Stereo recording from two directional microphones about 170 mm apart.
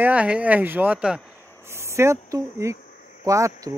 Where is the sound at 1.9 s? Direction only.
15° right (ahead or behind).